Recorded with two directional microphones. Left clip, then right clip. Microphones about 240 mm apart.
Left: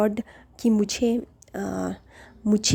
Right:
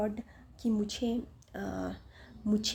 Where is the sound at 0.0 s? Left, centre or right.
Left.